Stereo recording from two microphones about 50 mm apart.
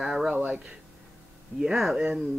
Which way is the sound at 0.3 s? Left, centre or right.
Right.